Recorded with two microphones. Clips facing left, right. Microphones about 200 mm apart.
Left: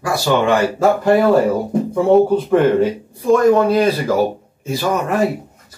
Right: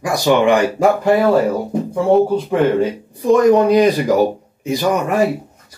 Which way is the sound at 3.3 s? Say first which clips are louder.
Right 2 dB; 15° right (ahead or behind).